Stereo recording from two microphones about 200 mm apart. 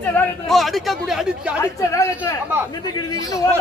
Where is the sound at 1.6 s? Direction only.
15° left (ahead or behind).